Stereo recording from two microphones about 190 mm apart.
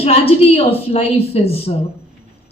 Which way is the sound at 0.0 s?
30° left (ahead or behind).